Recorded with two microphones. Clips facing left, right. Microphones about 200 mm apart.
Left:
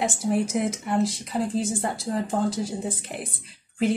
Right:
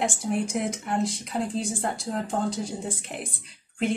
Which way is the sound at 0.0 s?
Centre (ahead or behind).